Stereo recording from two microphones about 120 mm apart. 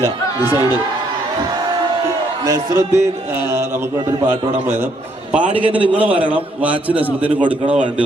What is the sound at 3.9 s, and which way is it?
A man's voice, 30° right (ahead or behind).